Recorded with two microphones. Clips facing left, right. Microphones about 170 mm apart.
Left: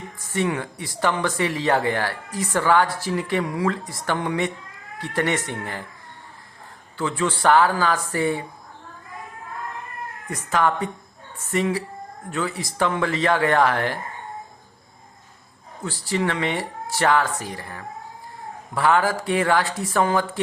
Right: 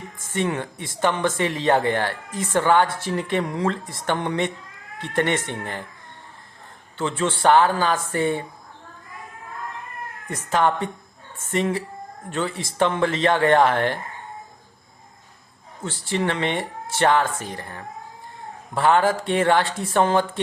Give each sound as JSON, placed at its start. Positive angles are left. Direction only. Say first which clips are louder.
{"t": 0.3, "sound": "speech", "louder": "even", "side_deg": -25}
{"t": 6.9, "sound": "speech", "louder": "even", "side_deg": -25}
{"t": 10.2, "sound": "speech", "louder": "right 1 dB", "side_deg": -25}
{"t": 12.3, "sound": "speech", "louder": "even", "side_deg": -25}
{"t": 15.8, "sound": "speech", "louder": "even", "side_deg": -25}